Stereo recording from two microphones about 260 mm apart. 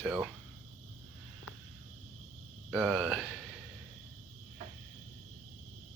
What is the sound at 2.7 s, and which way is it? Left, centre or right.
Speech, centre.